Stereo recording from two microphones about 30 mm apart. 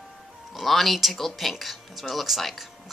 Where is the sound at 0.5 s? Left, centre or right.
Centre.